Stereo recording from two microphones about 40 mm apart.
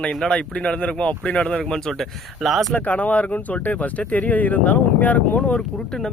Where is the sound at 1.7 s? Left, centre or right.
Centre.